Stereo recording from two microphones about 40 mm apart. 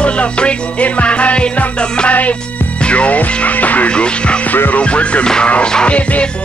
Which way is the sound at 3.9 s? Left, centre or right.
Left.